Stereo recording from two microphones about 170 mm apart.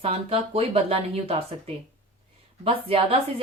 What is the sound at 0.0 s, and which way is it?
A woman's voice, 35° right (ahead or behind).